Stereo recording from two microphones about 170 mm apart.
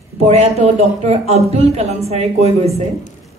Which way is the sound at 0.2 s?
40° right (ahead or behind).